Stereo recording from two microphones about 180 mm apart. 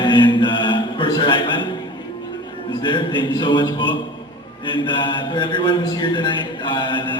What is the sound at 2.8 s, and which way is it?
Mantra, 25° left (ahead or behind).